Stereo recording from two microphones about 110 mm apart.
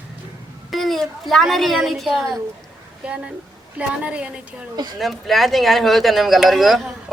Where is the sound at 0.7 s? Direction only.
Centre (ahead or behind).